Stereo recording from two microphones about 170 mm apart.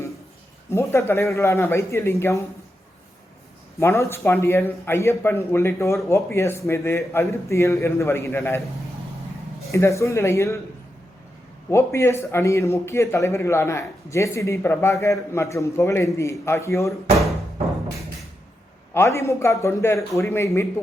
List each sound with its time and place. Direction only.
0.7 s a man's voice: 15° left (ahead or behind)
3.8 s a man's voice: 15° left (ahead or behind)
9.7 s a man's voice: 15° left (ahead or behind)
11.7 s a man's voice: 15° left (ahead or behind)
18.9 s a man's voice: 15° left (ahead or behind)